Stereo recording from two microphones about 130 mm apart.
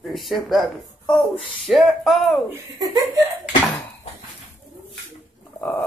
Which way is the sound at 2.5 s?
25° right (ahead or behind).